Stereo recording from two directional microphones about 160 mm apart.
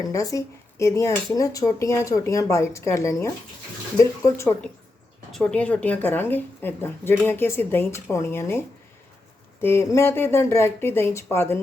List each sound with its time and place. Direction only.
0.0 s speech: 20° left (ahead or behind)
5.3 s speech: 5° left (ahead or behind)